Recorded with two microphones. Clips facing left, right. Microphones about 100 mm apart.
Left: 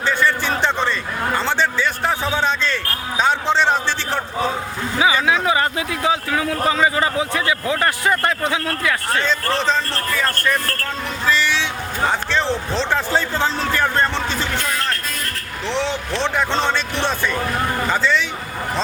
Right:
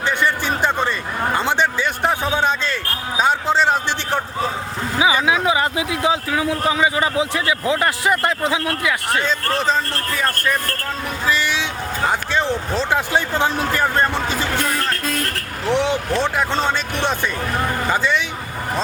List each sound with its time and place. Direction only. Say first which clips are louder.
0.0 s a sound: left 1 dB; 20° right (ahead or behind)
4.9 s speech: even; 20° right (ahead or behind)
15.7 s speech: right 4 dB; 15° right (ahead or behind)